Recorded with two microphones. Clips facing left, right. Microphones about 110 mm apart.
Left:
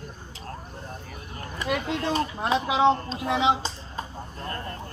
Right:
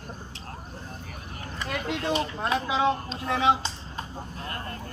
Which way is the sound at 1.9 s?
40° left (ahead or behind).